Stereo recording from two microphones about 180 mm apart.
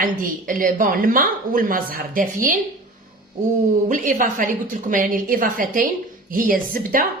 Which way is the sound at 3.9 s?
45° right (ahead or behind).